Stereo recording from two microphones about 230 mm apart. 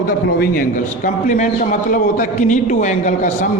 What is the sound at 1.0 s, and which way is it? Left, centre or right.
A man's voice, left.